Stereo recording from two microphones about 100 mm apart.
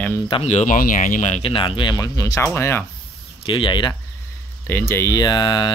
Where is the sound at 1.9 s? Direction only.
35° left (ahead or behind).